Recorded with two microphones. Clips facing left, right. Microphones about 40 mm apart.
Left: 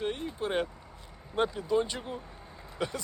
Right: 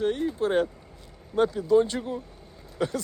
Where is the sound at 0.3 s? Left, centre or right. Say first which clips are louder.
Right 7 dB; centre.